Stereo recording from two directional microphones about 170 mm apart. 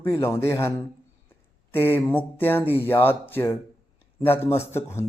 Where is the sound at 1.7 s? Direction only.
10° left (ahead or behind).